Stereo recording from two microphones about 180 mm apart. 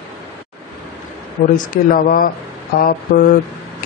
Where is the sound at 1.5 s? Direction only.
50° left (ahead or behind).